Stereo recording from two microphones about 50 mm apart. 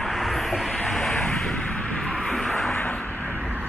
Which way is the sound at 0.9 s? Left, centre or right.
Centre.